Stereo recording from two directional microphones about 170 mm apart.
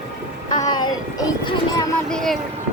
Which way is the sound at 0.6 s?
25° left (ahead or behind).